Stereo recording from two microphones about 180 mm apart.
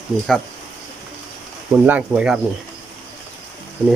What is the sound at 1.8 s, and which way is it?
Speech, 10° right (ahead or behind).